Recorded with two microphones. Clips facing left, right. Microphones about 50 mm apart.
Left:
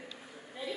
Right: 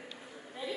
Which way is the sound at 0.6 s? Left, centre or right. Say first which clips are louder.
Right 1 dB; centre.